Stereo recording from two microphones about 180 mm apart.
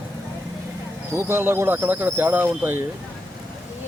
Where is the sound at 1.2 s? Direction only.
15° right (ahead or behind).